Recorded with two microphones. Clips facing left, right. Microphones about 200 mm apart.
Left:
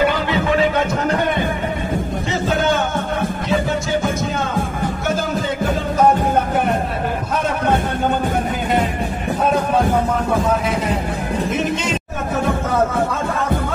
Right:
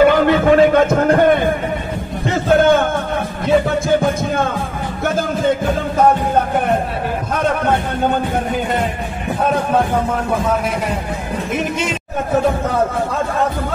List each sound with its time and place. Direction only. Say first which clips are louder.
0.0 s music: right 7 dB; 50° right (ahead or behind)
2.4 s music: right 7 dB; 55° right (ahead or behind)